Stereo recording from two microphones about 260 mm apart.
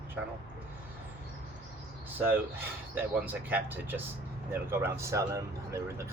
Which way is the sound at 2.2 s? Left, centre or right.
Centre.